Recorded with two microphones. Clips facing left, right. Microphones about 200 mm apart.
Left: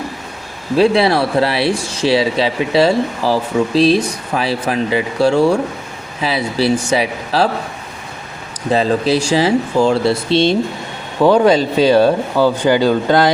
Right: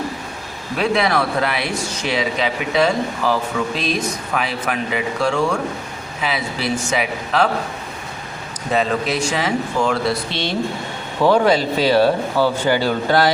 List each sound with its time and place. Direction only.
0.8 s speech: 30° left (ahead or behind)
8.7 s speech: 30° left (ahead or behind)